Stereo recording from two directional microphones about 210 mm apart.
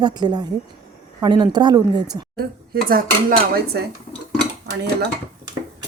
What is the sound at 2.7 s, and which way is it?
Speech, 45° right (ahead or behind).